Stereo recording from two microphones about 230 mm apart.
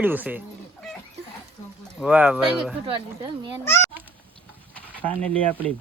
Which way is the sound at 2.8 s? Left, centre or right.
Right.